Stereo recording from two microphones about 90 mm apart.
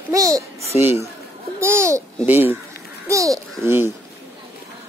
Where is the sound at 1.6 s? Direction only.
30° right (ahead or behind).